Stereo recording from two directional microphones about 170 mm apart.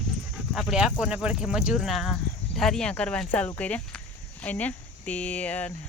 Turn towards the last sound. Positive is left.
turn(degrees=10)  # may be behind; listen again after turning